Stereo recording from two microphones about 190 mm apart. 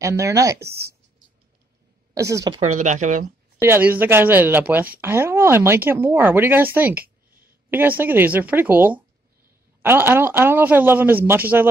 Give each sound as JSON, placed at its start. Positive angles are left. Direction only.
{"t": 0.0, "sound": "speech", "side_deg": -15}
{"t": 2.1, "sound": "speech", "side_deg": -15}
{"t": 2.6, "sound": "speech", "side_deg": -40}
{"t": 3.6, "sound": "speech", "side_deg": -10}